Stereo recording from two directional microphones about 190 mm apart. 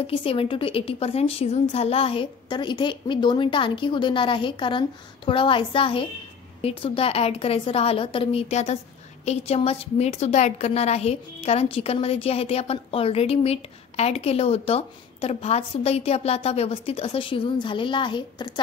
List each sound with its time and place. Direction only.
0.0 s a woman's voice: 30° left (ahead or behind)